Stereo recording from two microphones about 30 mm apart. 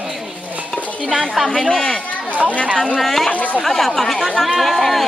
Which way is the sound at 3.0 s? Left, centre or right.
Centre.